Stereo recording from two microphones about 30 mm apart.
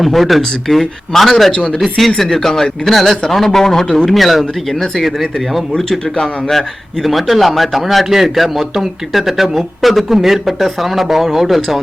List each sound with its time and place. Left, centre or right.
0.0 s a man's voice: centre
1.5 s speech: left
1.8 s a man's voice: centre
4.1 s a man's voice: centre